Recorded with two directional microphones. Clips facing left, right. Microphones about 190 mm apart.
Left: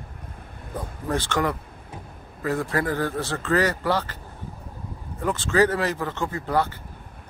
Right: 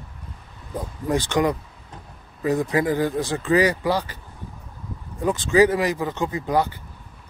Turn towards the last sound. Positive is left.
turn(degrees=-15)  # may be behind; listen again after turning